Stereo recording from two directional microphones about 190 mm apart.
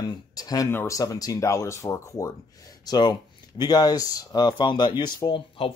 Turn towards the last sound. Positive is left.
turn(degrees=25)  # may be behind; listen again after turning